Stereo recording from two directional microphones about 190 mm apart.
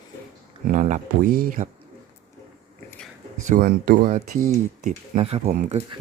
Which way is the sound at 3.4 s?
45° right (ahead or behind).